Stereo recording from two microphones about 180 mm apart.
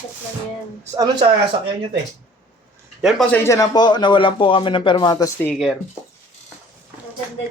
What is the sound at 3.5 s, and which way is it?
A man's voice, 20° left (ahead or behind).